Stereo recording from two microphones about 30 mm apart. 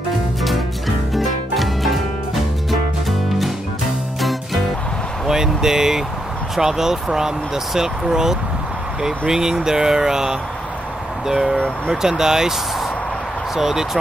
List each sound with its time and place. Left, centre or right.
0.4 s music: centre
5.2 s vehicle: centre
6.5 s speech: centre
9.3 s a sound: right
11.9 s speech: centre
13.6 s speech: centre